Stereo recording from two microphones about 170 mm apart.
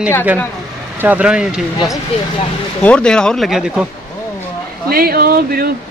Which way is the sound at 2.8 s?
5° left (ahead or behind).